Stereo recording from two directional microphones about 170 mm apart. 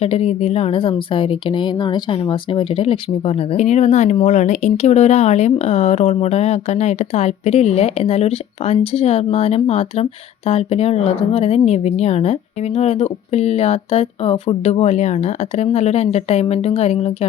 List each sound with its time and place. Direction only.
0.0 s a woman's voice: 35° left (ahead or behind)